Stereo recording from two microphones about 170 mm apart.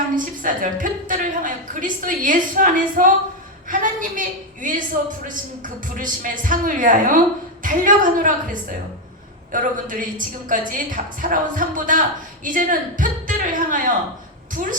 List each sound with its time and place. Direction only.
0.4 s a woman's voice: 50° right (ahead or behind)